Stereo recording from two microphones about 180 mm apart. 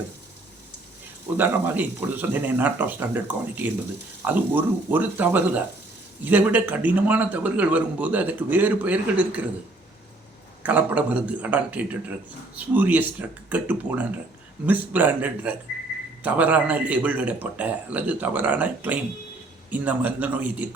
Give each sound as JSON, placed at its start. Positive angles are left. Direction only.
{"t": 1.4, "sound": "a man's voice", "side_deg": -10}
{"t": 10.6, "sound": "a man's voice", "side_deg": -10}